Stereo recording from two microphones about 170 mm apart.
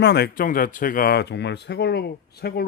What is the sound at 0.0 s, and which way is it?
Speech, 70° left (ahead or behind).